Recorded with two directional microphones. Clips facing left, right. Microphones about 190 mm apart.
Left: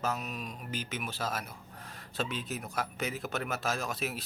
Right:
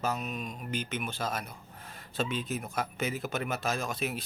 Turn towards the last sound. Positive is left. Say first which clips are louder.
# right 2 dB
turn(degrees=0)  # may be behind; listen again after turning